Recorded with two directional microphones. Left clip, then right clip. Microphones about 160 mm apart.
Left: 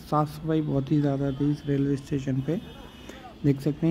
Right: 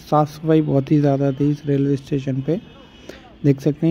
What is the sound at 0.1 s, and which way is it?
Speech, 30° right (ahead or behind).